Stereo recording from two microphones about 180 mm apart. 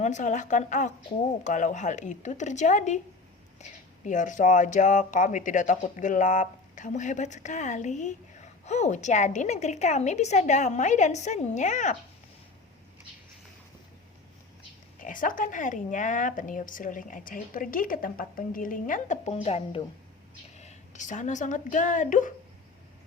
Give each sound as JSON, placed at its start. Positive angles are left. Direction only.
{"t": 0.0, "sound": "a woman's voice", "side_deg": 45}
{"t": 14.9, "sound": "a woman's voice", "side_deg": 50}